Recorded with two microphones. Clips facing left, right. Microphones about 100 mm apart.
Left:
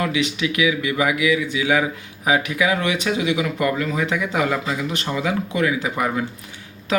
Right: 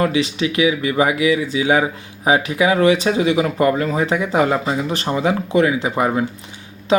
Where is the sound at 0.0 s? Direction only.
35° right (ahead or behind).